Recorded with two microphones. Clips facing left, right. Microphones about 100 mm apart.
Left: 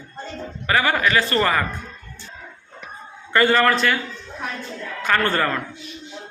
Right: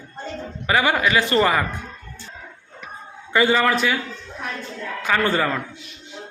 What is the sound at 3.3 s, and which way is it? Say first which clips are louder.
Speech: left 1 dB; 5° right (ahead or behind).